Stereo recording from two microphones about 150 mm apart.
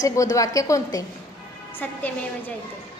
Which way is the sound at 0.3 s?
20° left (ahead or behind).